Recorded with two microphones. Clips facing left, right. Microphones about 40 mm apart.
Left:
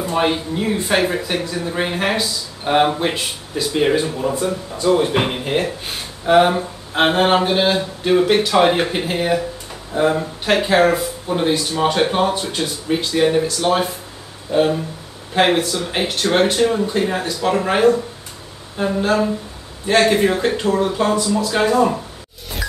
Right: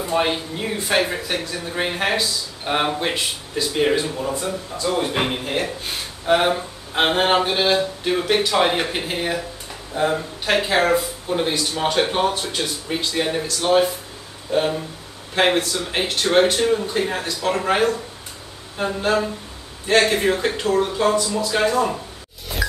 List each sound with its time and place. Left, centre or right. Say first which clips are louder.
0.0 s speech: left 2 dB; centre
15.3 s speech: left 3 dB; centre
22.5 s music: right 2 dB; centre